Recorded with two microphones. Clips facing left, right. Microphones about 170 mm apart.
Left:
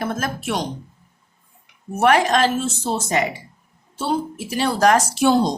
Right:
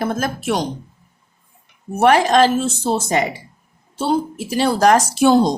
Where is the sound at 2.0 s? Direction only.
35° right (ahead or behind).